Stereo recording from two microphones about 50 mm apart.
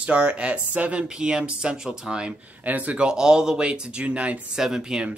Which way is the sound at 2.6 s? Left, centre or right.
Right.